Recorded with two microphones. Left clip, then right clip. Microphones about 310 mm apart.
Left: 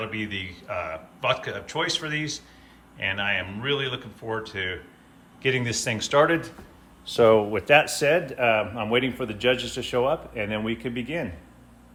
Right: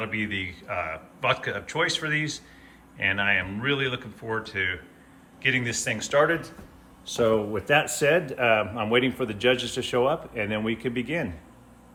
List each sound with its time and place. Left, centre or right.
0.0 s a man's voice: centre
7.6 s a man's voice: centre